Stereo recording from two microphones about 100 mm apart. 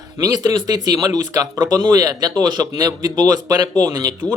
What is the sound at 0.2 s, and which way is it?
Speech, 40° right (ahead or behind).